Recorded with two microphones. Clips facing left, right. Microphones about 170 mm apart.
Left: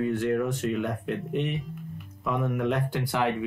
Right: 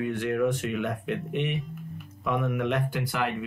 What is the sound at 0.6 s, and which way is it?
Speech, 65° right (ahead or behind).